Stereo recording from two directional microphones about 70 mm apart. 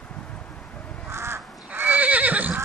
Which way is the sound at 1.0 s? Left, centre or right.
Right.